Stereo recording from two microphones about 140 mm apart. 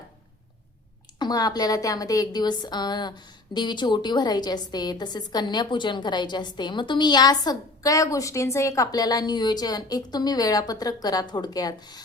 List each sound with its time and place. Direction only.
1.2 s a woman's voice: 30° left (ahead or behind)